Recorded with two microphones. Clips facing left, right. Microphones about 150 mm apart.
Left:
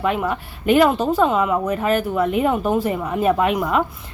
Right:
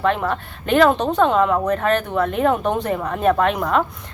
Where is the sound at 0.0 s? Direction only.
10° left (ahead or behind).